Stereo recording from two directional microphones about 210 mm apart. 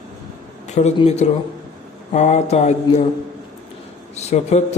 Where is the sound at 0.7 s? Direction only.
30° left (ahead or behind).